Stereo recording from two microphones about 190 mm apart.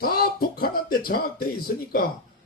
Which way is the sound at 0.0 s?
50° left (ahead or behind).